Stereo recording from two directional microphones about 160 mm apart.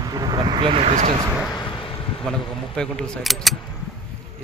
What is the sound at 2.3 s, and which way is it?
Speech, 5° left (ahead or behind).